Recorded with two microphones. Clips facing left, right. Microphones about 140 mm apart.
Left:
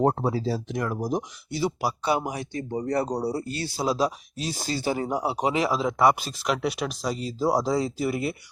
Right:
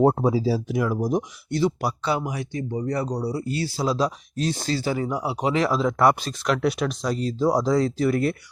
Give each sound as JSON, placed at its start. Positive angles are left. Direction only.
{"t": 0.0, "sound": "speech", "side_deg": -10}
{"t": 2.6, "sound": "speech", "side_deg": 40}
{"t": 3.5, "sound": "speech", "side_deg": 25}
{"t": 3.8, "sound": "speech", "side_deg": 10}
{"t": 4.9, "sound": "speech", "side_deg": 30}